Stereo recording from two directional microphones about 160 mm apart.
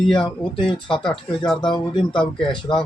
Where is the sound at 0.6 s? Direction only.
5° left (ahead or behind).